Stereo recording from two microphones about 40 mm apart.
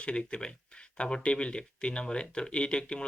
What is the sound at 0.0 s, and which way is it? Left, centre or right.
Speech, left.